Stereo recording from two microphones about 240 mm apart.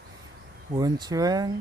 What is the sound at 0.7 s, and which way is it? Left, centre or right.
Speech, centre.